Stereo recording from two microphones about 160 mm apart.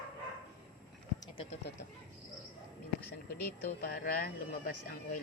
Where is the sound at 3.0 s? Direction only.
80° left.